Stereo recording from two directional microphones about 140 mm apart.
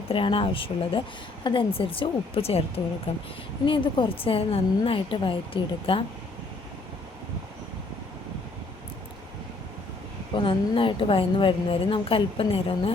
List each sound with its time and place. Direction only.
0.1 s a woman's voice: 40° left (ahead or behind)
10.3 s a woman's voice: 35° left (ahead or behind)